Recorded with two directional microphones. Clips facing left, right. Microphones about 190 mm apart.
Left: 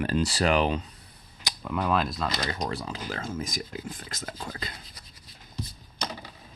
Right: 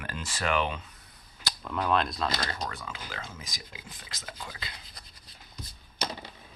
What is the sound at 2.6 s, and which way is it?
Speech, 35° left (ahead or behind).